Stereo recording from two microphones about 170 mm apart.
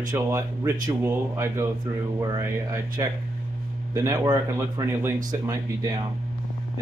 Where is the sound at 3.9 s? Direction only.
20° right (ahead or behind).